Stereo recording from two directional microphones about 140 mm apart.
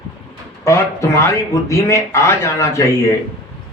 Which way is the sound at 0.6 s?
20° left (ahead or behind).